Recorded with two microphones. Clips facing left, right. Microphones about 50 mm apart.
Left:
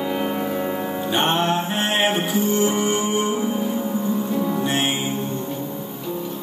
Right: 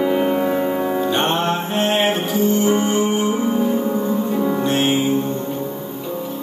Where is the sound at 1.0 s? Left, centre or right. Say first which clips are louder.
Left 3 dB; centre.